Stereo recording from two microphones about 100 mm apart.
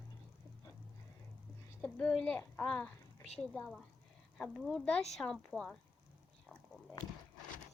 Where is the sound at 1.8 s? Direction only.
10° left (ahead or behind).